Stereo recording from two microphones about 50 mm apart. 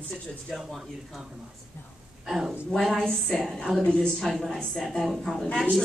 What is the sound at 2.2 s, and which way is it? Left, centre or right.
Speech, centre.